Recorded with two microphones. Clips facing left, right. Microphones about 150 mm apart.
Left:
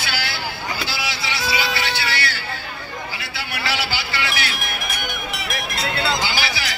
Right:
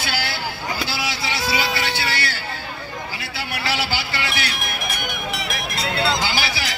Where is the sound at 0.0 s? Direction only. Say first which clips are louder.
Right 1 dB; 45° right (ahead or behind).